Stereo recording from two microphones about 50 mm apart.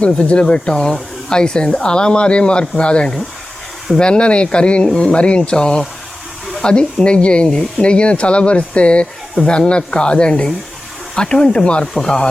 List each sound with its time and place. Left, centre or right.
0.3 s speech: left